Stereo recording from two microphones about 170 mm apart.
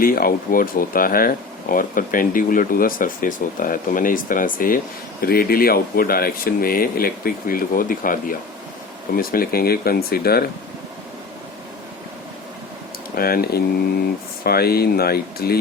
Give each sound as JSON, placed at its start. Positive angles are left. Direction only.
{"t": 0.0, "sound": "speech", "side_deg": 60}
{"t": 13.1, "sound": "speech", "side_deg": 60}